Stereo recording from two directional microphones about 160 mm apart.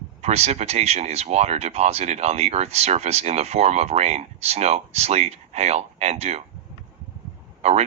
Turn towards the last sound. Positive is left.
turn(degrees=-40)  # may be behind; listen again after turning